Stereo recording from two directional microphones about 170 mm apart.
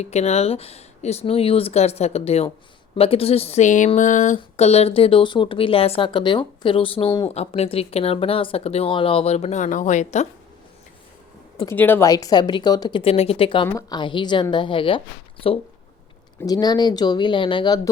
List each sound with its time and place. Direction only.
0.0 s speech: 40° left (ahead or behind)
11.7 s a woman's voice: 15° left (ahead or behind); by 17.7 s 30° left (ahead or behind)